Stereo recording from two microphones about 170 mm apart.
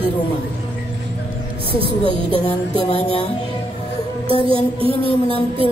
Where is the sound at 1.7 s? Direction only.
30° right (ahead or behind).